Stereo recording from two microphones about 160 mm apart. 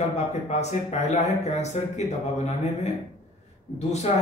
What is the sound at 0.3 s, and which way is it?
Speech, 45° left (ahead or behind).